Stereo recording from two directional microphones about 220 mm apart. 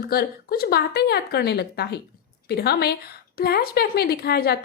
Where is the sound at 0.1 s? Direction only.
45° left (ahead or behind).